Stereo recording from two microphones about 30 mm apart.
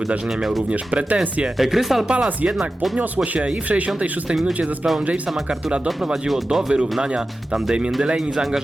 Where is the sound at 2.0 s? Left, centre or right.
Right.